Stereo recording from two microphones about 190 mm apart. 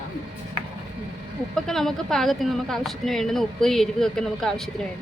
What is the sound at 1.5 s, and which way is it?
Speech, centre (ahead or behind).